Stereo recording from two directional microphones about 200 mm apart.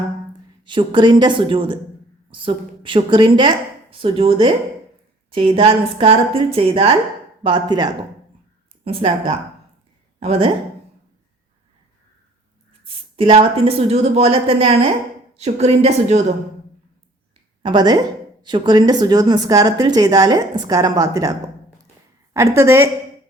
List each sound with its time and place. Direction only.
0.6 s a woman's voice: 25° right (ahead or behind)
12.8 s a woman's voice: 30° right (ahead or behind)
17.6 s a woman's voice: 20° right (ahead or behind)